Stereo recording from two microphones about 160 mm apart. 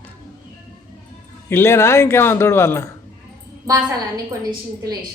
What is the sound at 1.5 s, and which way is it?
A man's voice, 15° left (ahead or behind).